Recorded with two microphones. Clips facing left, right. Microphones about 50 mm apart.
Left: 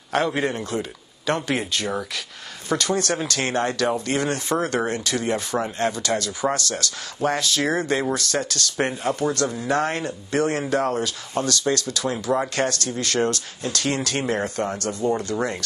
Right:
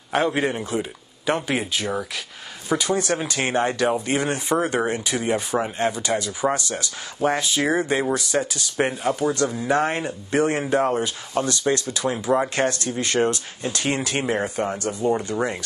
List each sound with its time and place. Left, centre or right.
0.1 s speech: centre